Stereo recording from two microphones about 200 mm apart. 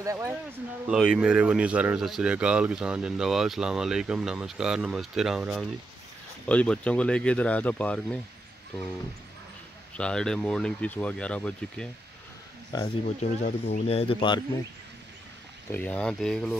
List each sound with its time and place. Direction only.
0.0 s speech: 15° right (ahead or behind)
0.8 s speech: 5° right (ahead or behind)
9.9 s speech: 5° left (ahead or behind)
12.7 s speech: 25° left (ahead or behind)
15.7 s speech: 5° left (ahead or behind)